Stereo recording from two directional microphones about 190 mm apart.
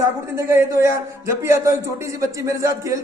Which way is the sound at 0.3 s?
15° right (ahead or behind).